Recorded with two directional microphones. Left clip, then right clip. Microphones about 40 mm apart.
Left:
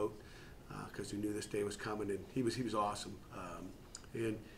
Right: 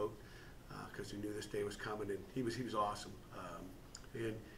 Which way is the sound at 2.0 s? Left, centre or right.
Left.